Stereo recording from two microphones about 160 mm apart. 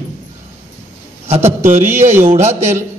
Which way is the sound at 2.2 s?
40° right (ahead or behind).